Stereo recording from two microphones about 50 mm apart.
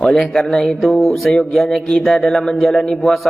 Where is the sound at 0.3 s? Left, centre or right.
Centre.